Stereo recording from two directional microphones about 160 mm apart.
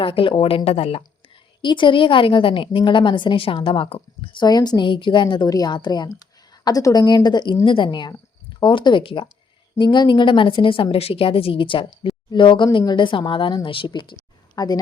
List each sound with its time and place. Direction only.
0.0 s a woman's voice: 35° left (ahead or behind)